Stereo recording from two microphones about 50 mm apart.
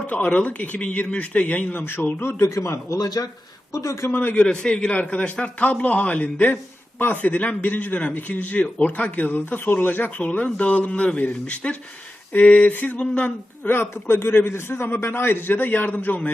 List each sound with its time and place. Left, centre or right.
0.1 s a man's voice: left
2.2 s speech: left
3.7 s speech: left
4.1 s a man's voice: left
4.5 s a man's voice: centre; by 10.1 s left
10.2 s a man's voice: left
13.7 s a man's voice: left